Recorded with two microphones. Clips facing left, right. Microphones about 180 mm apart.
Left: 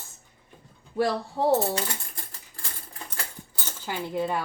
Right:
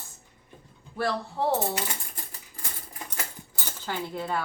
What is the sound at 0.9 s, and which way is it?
Speech, 15° left (ahead or behind).